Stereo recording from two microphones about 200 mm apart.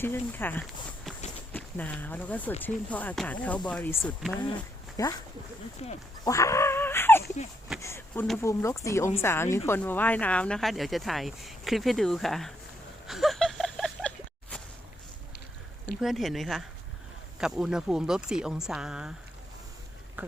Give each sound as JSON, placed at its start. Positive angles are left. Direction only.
{"t": 0.0, "sound": "speech", "side_deg": 10}
{"t": 5.8, "sound": "speech", "side_deg": 30}
{"t": 6.2, "sound": "dog", "side_deg": 15}
{"t": 7.8, "sound": "speech", "side_deg": 15}
{"t": 13.1, "sound": "a sound", "side_deg": 0}
{"t": 16.0, "sound": "speech", "side_deg": 0}
{"t": 20.2, "sound": "a sound", "side_deg": -10}